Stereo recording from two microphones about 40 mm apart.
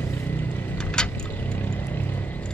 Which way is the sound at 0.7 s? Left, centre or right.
Left.